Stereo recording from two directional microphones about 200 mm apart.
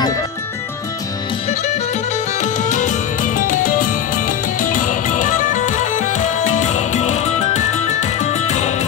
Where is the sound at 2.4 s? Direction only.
40° left (ahead or behind).